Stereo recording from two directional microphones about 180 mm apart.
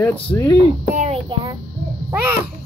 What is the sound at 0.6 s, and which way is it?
Speech, 35° right (ahead or behind).